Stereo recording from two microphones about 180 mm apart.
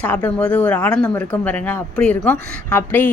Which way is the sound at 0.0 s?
10° left (ahead or behind).